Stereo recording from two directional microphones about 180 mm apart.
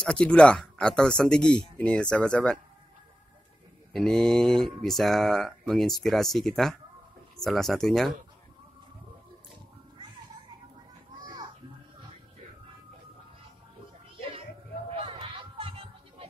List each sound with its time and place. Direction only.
0.0 s speech: 5° left (ahead or behind)
3.9 s speech: 5° left (ahead or behind)
11.1 s children playing: 25° right (ahead or behind)
14.9 s music: 30° right (ahead or behind)